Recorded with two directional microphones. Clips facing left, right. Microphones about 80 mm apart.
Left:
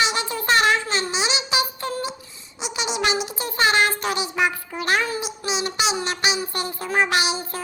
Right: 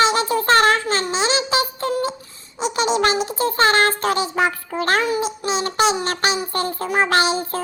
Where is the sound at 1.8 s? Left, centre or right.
Right.